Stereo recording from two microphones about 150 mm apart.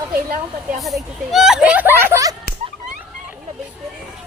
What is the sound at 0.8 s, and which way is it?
Speech, centre (ahead or behind).